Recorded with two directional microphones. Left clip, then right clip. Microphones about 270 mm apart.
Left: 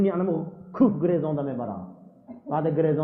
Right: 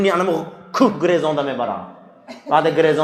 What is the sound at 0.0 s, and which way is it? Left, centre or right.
A man's voice, centre.